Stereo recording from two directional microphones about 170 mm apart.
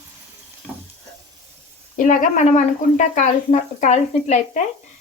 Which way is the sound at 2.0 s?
50° left (ahead or behind).